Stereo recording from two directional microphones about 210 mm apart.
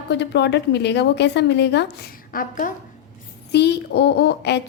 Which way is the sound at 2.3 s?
40° left (ahead or behind).